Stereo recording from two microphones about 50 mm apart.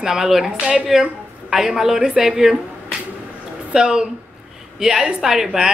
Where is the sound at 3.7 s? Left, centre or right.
Centre.